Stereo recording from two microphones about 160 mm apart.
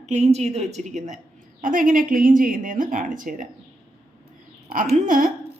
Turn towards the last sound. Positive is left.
turn(degrees=-55)  # may be behind; listen again after turning